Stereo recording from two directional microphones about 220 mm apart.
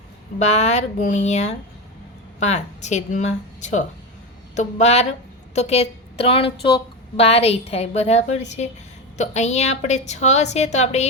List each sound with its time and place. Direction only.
0.3 s a woman's voice: 30° left (ahead or behind)